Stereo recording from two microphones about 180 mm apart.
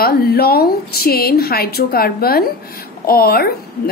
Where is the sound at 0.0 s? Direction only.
55° left (ahead or behind).